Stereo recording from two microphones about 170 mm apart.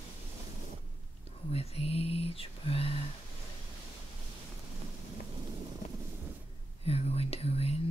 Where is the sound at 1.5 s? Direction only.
35° left (ahead or behind).